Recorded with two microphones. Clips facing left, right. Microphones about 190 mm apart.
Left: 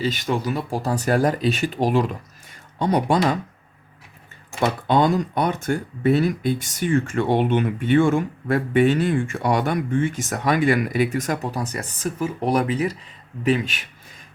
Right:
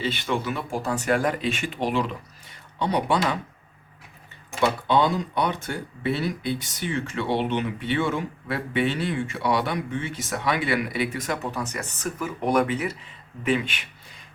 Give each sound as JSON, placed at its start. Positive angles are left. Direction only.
{"t": 0.0, "sound": "speech", "side_deg": 40}
{"t": 4.6, "sound": "speech", "side_deg": 45}